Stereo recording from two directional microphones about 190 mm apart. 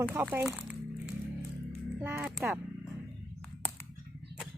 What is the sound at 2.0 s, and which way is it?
Speech, 5° right (ahead or behind).